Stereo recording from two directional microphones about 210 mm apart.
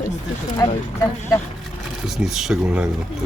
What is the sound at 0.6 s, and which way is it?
Speech, 15° left (ahead or behind).